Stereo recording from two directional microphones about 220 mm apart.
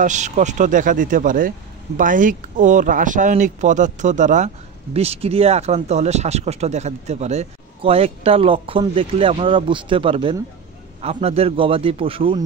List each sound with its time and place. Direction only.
0.0 s speech: 35° right (ahead or behind)